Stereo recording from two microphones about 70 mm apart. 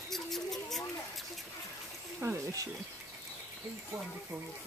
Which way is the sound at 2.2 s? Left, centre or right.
Right.